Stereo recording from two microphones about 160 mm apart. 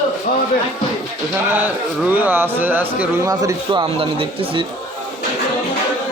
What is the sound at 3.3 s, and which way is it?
Speech, 25° right (ahead or behind).